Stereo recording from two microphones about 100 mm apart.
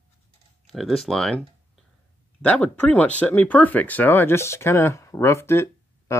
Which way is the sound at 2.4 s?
15° left (ahead or behind).